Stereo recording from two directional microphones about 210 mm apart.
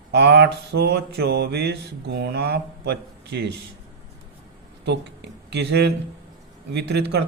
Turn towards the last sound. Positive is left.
turn(degrees=-50)  # may be behind; listen again after turning